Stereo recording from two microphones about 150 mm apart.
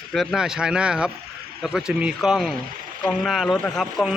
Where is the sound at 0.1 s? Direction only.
Centre (ahead or behind).